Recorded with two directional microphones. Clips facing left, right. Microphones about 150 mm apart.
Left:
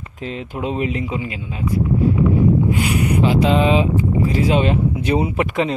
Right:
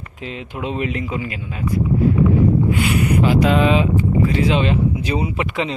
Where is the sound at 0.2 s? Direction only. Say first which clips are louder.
Left 2 dB; 35° left (ahead or behind); by 1.6 s 20° left (ahead or behind).